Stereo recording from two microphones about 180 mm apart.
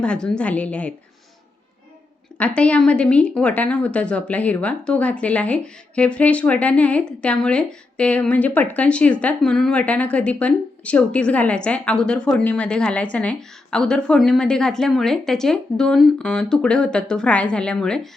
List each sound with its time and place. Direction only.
0.0 s a woman's voice: 5° left (ahead or behind)
2.6 s speech: 5° left (ahead or behind)